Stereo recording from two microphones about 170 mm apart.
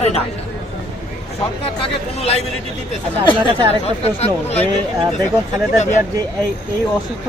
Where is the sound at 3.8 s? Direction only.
35° left (ahead or behind).